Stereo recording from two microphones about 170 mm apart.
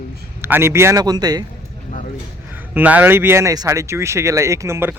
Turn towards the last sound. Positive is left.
turn(degrees=-15)  # may be behind; listen again after turning